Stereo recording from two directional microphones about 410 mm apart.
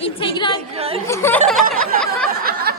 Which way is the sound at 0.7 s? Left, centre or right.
Centre.